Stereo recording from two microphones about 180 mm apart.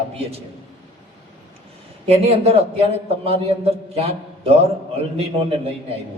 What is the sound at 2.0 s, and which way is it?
A man's voice, 35° right (ahead or behind).